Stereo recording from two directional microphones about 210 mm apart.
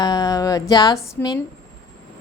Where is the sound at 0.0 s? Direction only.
20° left (ahead or behind).